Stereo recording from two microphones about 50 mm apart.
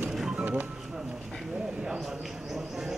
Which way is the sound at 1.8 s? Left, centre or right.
Centre.